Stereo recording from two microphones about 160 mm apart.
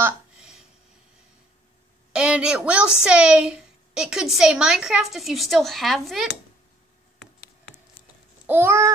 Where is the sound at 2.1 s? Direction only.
5° right (ahead or behind).